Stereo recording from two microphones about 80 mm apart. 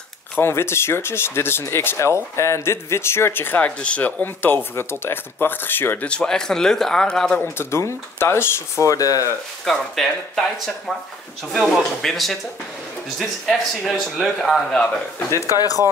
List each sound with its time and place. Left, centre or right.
0.4 s speech: left
6.0 s speech: centre
7.5 s speech: left
9.7 s speech: centre
11.7 s speech: centre
15.3 s speech: left